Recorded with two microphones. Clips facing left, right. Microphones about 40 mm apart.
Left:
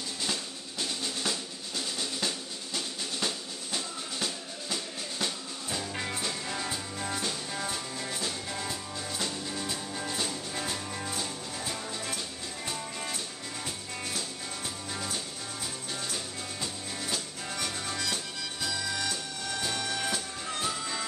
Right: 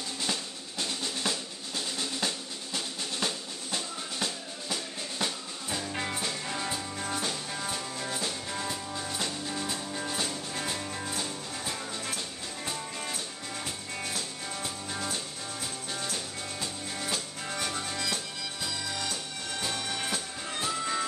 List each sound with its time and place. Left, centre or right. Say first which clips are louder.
0.2 s drum: even; centre
5.2 s music: right 1 dB; centre
20.8 s music: right 4 dB; centre